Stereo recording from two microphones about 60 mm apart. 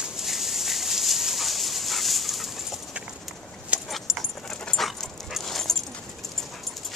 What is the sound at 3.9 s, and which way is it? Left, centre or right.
Dog, centre.